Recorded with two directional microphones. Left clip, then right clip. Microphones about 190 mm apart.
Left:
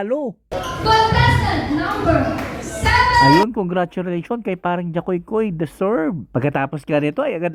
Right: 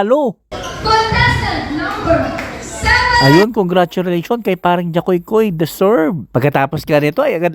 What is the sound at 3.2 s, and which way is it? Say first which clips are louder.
Speech: right 3 dB; 45° right (ahead or behind).